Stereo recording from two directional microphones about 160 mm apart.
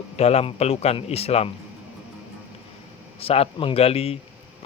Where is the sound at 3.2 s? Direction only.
40° left (ahead or behind).